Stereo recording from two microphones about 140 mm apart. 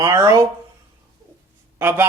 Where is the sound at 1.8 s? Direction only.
15° right (ahead or behind).